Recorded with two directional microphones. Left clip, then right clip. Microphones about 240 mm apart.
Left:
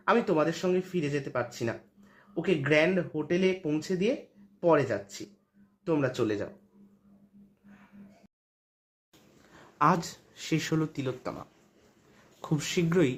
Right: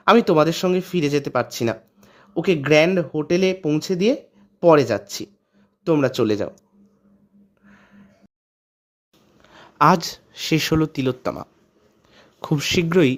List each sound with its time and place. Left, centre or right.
0.0 s speech: right
9.6 s speech: right